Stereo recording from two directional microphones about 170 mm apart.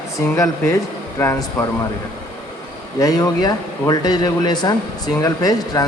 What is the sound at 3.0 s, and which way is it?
Speech, 20° left (ahead or behind).